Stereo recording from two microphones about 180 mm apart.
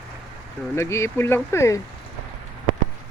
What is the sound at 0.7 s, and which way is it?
Speech, 15° left (ahead or behind).